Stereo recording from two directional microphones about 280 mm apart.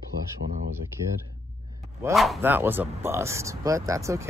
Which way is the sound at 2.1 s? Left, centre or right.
Centre.